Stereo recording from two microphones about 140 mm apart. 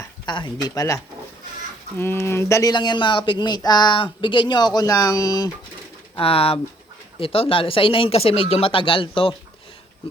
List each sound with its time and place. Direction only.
0.3 s speech: 35° left (ahead or behind)
6.1 s speech: 40° left (ahead or behind)